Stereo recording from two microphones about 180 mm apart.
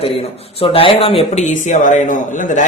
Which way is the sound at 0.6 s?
30° left (ahead or behind).